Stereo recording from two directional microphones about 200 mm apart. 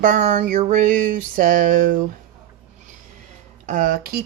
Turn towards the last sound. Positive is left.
turn(degrees=-45)  # may be behind; listen again after turning